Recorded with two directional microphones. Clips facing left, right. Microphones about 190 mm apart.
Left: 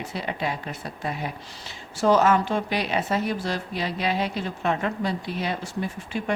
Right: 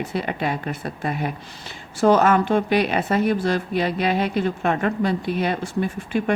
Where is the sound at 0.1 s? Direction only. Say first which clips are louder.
Right 4 dB; 55° right (ahead or behind).